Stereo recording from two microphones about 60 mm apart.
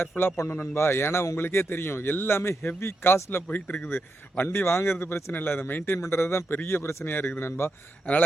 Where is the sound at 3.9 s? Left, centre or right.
Left.